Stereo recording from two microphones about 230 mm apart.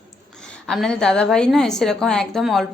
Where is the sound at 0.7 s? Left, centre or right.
Centre.